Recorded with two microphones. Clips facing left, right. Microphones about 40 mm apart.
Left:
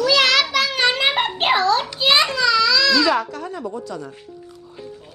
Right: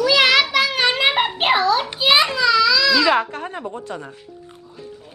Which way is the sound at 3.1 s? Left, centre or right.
Right.